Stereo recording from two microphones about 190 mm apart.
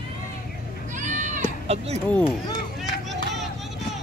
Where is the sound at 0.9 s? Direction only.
40° right (ahead or behind).